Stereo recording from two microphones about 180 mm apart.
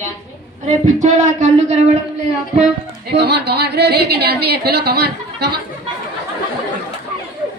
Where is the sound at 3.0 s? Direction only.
65° right (ahead or behind).